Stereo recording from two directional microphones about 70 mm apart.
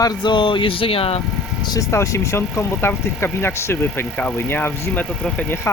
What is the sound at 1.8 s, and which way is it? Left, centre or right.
Speech, left.